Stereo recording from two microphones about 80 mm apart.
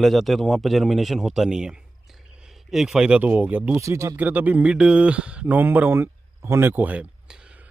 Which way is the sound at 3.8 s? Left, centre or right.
Right.